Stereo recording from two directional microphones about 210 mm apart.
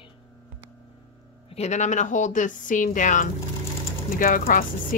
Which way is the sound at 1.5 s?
35° left (ahead or behind).